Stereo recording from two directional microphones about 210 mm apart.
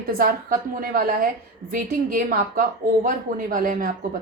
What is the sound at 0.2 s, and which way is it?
A woman's voice, 40° right (ahead or behind).